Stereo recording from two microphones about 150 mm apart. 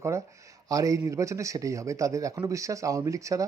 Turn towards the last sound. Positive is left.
turn(degrees=-20)  # may be behind; listen again after turning